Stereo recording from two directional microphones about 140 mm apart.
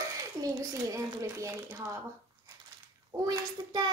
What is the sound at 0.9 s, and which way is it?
A woman's voice, 20° right (ahead or behind).